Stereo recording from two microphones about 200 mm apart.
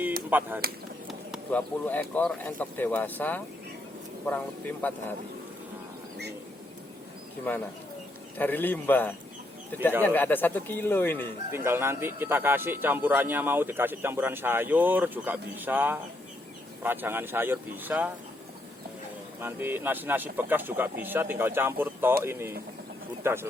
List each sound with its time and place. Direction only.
0.3 s speech: 10° right (ahead or behind)
1.5 s speech: 10° left (ahead or behind)
8.4 s speech: 10° left (ahead or behind)
11.5 s speech: 10° right (ahead or behind)
19.4 s speech: 10° right (ahead or behind)